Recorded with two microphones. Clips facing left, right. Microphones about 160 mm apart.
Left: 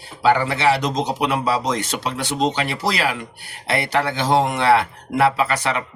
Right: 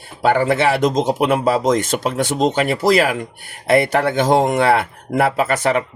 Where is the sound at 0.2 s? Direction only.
50° right (ahead or behind).